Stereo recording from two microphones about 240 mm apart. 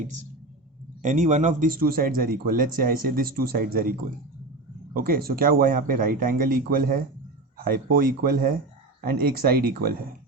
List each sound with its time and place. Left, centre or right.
1.0 s speech: right